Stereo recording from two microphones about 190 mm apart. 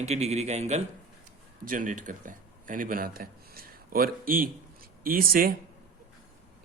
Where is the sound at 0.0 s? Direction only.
35° right (ahead or behind).